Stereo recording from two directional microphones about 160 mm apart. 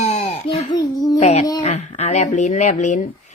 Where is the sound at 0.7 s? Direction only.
25° left (ahead or behind).